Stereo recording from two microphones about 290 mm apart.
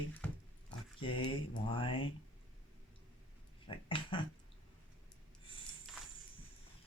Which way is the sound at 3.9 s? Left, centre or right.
Centre.